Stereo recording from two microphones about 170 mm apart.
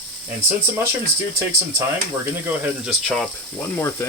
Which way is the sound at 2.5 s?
5° right (ahead or behind).